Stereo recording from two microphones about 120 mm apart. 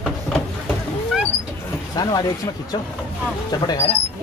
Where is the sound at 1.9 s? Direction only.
35° left (ahead or behind).